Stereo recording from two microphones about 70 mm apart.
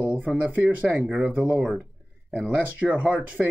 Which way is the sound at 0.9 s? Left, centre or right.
Centre.